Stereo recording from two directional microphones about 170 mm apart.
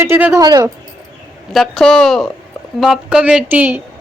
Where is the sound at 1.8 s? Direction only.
5° left (ahead or behind).